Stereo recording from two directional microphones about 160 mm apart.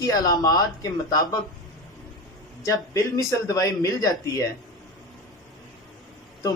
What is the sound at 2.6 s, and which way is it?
Speech, 20° left (ahead or behind).